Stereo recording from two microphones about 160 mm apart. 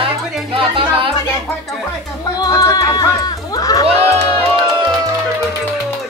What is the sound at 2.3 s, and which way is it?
Chatter, 25° left (ahead or behind).